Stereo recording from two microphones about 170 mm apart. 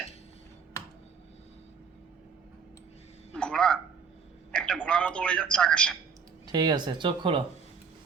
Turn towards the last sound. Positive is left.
turn(degrees=-30)  # may be behind; listen again after turning